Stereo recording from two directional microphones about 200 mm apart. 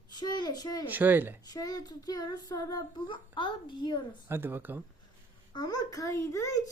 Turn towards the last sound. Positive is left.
turn(degrees=15)  # may be behind; listen again after turning